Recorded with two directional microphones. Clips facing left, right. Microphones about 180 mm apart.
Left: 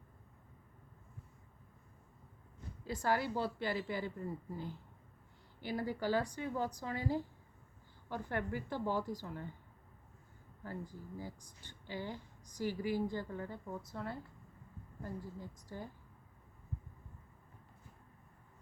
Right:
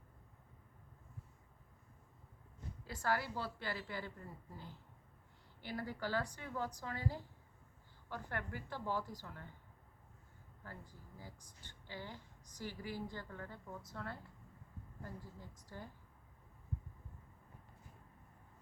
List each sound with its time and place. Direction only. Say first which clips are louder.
2.8 s a woman's voice: left 4 dB; 20° left (ahead or behind)
11.2 s a woman's voice: left 8 dB; 15° left (ahead or behind)